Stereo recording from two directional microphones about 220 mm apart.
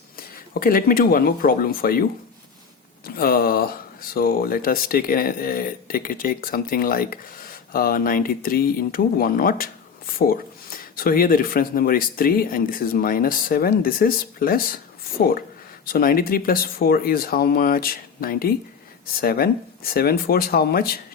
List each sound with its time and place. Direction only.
0.2 s speech: 40° left (ahead or behind)
3.2 s speech: 45° left (ahead or behind)